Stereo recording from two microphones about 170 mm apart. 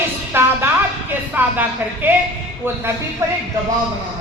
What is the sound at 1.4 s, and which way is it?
Speech, 10° right (ahead or behind).